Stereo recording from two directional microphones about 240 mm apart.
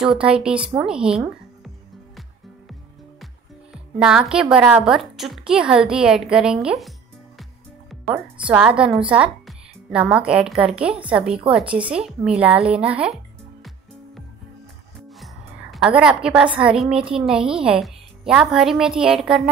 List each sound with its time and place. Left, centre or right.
0.0 s a woman's voice: centre
3.7 s a woman's voice: centre
7.9 s a woman's voice: centre
15.7 s a woman's voice: centre